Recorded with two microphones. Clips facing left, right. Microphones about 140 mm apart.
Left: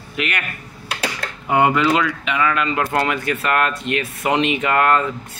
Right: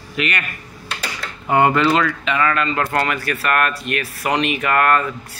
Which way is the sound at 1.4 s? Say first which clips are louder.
Right 1 dB; 10° left (ahead or behind).